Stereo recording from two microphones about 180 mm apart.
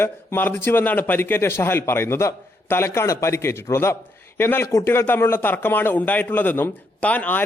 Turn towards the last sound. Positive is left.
turn(degrees=10)  # may be behind; listen again after turning